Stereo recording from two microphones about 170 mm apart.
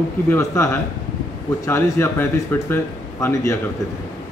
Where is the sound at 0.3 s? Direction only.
15° left (ahead or behind).